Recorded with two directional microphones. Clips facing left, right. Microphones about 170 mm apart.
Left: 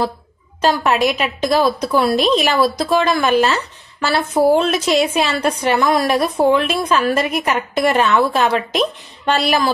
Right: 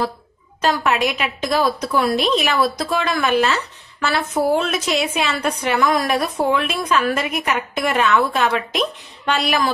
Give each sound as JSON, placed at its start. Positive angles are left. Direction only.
{"t": 0.6, "sound": "a woman's voice", "side_deg": 35}